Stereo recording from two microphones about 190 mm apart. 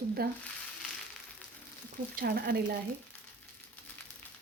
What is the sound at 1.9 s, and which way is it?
Speech, 50° right (ahead or behind).